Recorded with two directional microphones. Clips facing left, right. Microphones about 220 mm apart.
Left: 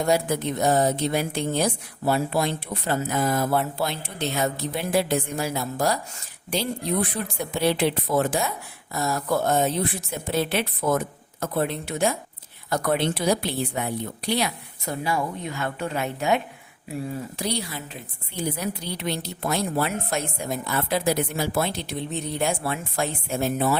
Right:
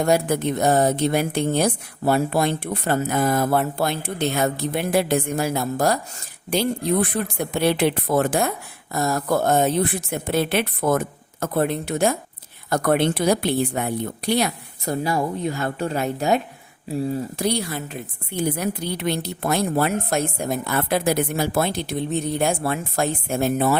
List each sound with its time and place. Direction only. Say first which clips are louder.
0.0 s a woman's voice: right 3 dB; 55° right (ahead or behind); by 16.4 s 40° right (ahead or behind)
17.3 s a woman's voice: right 5 dB; 50° right (ahead or behind)